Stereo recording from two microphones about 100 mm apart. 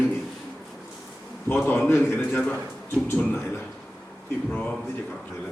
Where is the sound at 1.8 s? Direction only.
25° left (ahead or behind).